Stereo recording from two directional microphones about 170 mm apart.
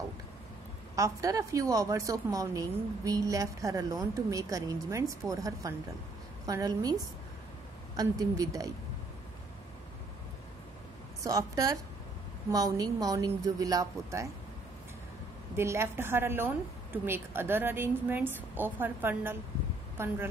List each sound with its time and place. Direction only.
0.9 s a woman's voice: 20° right (ahead or behind)
11.2 s a woman's voice: 20° right (ahead or behind)
15.5 s a woman's voice: 15° right (ahead or behind)